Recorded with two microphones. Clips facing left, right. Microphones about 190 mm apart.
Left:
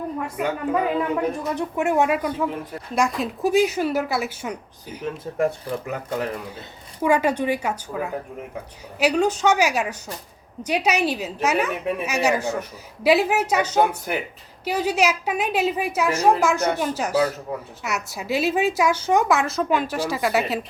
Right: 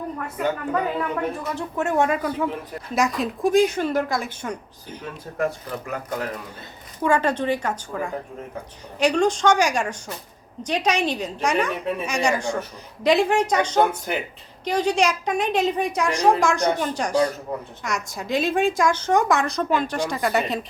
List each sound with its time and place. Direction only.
0.2 s a woman's voice: 10° left (ahead or behind)
5.0 s speech: 25° left (ahead or behind)
7.0 s a woman's voice: 10° left (ahead or behind)